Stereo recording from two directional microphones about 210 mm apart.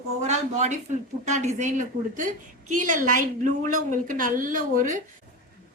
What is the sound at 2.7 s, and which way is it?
Speech, 40° right (ahead or behind).